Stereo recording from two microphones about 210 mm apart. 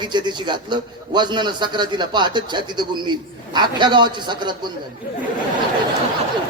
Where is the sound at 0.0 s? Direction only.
20° right (ahead or behind).